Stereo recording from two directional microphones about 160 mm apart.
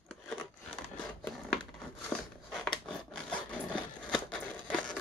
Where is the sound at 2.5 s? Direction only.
Centre (ahead or behind).